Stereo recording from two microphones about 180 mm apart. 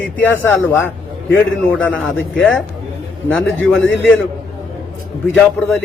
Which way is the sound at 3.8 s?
90° left.